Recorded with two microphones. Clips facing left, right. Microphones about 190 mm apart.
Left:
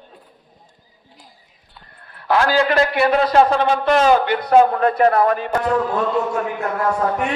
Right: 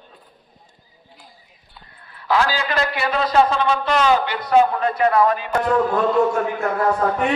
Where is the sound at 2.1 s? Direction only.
55° left (ahead or behind).